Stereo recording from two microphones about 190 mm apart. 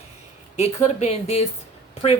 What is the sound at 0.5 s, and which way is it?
Speech, 35° left (ahead or behind).